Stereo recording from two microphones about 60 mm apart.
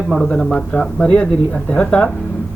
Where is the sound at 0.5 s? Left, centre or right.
Centre.